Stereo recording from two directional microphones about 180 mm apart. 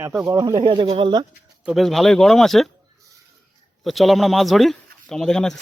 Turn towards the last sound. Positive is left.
turn(degrees=5)  # may be behind; listen again after turning